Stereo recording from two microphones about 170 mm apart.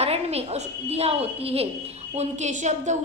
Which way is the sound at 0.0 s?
40° right (ahead or behind).